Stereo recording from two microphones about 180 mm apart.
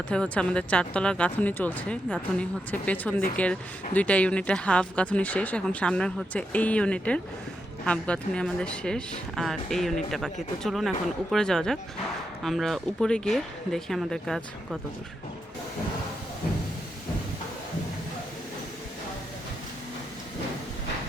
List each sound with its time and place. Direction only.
0.1 s speech: 5° left (ahead or behind)